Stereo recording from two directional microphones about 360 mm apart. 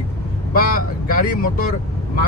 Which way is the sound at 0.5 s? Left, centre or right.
Left.